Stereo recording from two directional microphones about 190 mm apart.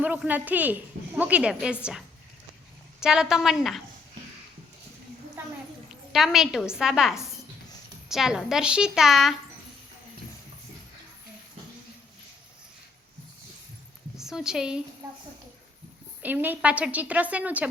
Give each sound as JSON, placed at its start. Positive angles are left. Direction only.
{"t": 0.0, "sound": "a woman's voice", "side_deg": -10}
{"t": 5.9, "sound": "a woman's voice", "side_deg": 0}
{"t": 14.2, "sound": "a woman's voice", "side_deg": 0}
{"t": 15.0, "sound": "a sound", "side_deg": -10}
{"t": 16.2, "sound": "a woman's voice", "side_deg": -10}